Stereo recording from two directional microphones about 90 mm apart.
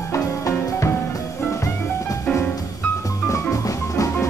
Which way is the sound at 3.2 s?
35° left (ahead or behind).